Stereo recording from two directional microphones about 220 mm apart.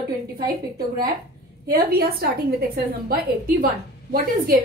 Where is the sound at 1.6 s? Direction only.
45° right (ahead or behind).